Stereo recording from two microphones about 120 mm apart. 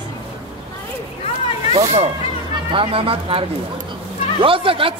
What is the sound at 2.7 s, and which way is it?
A man's voice, 50° right (ahead or behind).